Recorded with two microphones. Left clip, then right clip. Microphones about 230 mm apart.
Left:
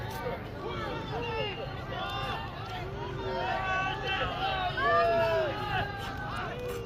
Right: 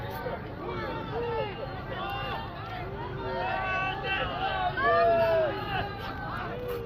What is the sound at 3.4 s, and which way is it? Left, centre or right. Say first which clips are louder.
Run: right 1 dB; right.